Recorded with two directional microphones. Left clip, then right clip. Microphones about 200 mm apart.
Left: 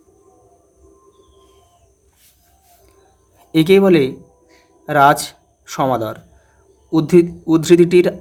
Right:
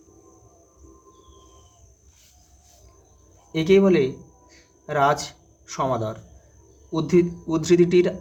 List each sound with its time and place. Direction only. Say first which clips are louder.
3.5 s speech: left 6 dB; 45° left (ahead or behind)